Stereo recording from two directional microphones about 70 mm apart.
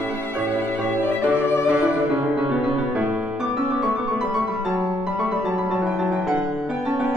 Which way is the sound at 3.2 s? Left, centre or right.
Centre.